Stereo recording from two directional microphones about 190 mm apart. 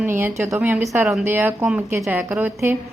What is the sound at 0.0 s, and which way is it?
A woman's voice, 10° right (ahead or behind).